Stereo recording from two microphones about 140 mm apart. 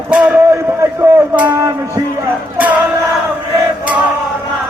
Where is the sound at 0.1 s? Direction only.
10° right (ahead or behind).